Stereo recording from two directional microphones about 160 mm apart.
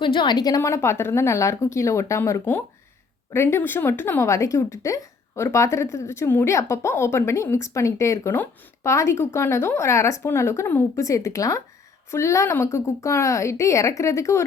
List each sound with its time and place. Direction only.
0.0 s a woman's voice: 30° left (ahead or behind)